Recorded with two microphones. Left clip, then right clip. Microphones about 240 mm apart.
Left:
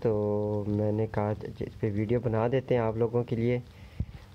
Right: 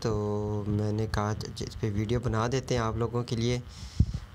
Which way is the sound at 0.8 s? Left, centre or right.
Centre.